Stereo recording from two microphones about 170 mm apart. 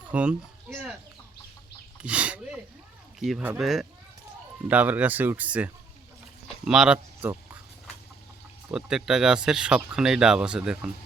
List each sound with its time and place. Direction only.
0.1 s speech: 10° right (ahead or behind)
2.0 s speech: 5° right (ahead or behind)
8.7 s speech: 5° right (ahead or behind)